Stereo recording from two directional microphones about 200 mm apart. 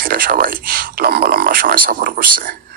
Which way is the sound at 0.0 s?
45° right (ahead or behind).